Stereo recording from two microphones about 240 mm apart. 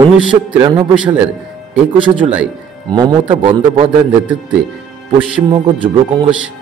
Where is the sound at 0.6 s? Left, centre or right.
Centre.